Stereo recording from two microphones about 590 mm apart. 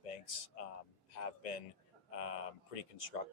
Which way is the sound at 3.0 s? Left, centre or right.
Left.